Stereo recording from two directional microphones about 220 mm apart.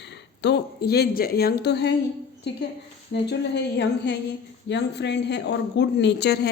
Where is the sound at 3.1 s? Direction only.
50° left (ahead or behind).